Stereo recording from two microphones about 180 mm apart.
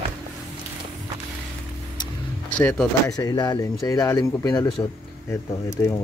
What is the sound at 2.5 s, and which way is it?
Speech, 5° left (ahead or behind).